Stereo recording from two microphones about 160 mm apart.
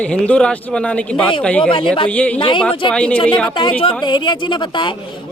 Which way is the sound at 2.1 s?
10° left (ahead or behind).